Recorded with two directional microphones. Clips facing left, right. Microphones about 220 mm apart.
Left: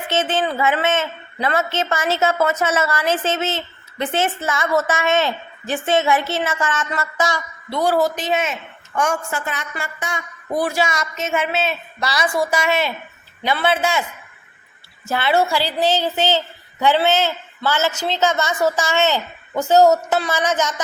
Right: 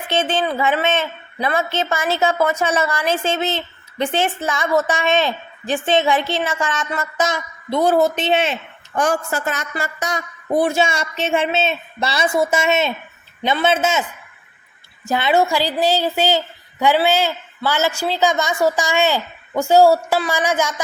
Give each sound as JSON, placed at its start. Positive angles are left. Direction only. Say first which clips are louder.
{"t": 0.1, "sound": "a woman's voice", "louder": "right 1 dB", "side_deg": -15}
{"t": 10.6, "sound": "a woman's voice", "louder": "right 2 dB", "side_deg": -25}
{"t": 15.0, "sound": "a woman's voice", "louder": "right 2 dB", "side_deg": -15}